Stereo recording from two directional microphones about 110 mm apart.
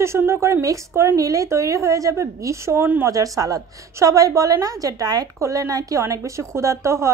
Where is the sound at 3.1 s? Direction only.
30° right (ahead or behind).